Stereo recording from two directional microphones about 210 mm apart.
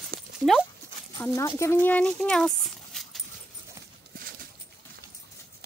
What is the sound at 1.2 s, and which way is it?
Speech, 15° left (ahead or behind).